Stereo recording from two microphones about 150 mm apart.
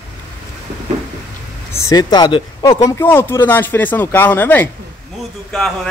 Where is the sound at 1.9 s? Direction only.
30° left (ahead or behind).